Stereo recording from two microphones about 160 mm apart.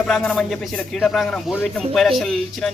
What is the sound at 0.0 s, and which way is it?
Speech, 5° left (ahead or behind).